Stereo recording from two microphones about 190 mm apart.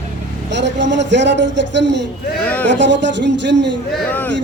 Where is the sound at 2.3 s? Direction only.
10° left (ahead or behind).